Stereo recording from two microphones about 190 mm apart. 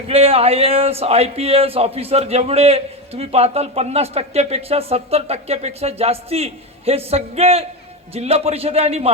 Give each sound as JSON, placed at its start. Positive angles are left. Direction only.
{"t": 0.1, "sound": "speech", "side_deg": -30}